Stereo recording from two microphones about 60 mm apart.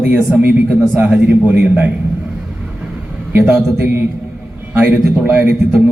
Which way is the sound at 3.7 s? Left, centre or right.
Right.